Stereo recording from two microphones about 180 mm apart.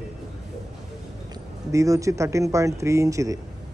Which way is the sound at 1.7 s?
20° right (ahead or behind).